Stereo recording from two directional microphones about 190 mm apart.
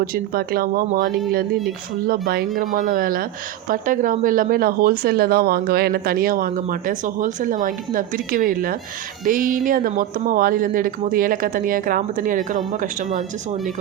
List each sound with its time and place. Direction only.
0.0 s speech: 50° right (ahead or behind)